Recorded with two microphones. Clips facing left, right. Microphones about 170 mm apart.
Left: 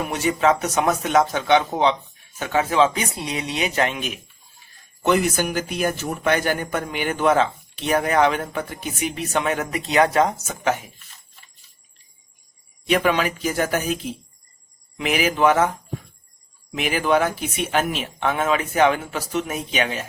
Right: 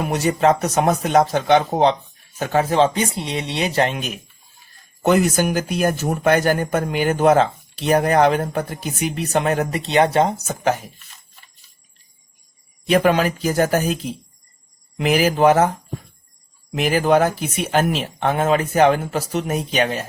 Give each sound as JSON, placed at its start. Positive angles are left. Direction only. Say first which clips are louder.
{"t": 0.1, "sound": "speech", "louder": "right 3 dB", "side_deg": -40}
{"t": 12.9, "sound": "speech", "louder": "right 4 dB", "side_deg": -40}
{"t": 16.7, "sound": "speech", "louder": "right 4 dB", "side_deg": -40}